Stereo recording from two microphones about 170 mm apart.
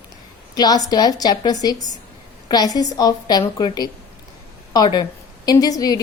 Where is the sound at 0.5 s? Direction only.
25° left (ahead or behind).